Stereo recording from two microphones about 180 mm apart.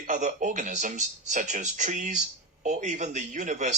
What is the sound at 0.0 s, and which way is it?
Speech, 45° right (ahead or behind).